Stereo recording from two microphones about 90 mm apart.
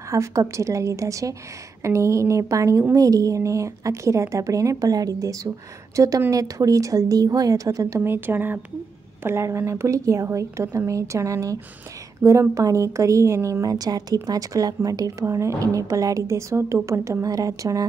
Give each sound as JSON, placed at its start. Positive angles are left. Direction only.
{"t": 0.1, "sound": "a woman's voice", "side_deg": -35}
{"t": 8.0, "sound": "a woman's voice", "side_deg": -25}